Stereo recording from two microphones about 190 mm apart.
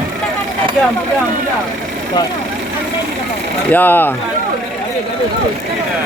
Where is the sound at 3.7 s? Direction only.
10° left (ahead or behind).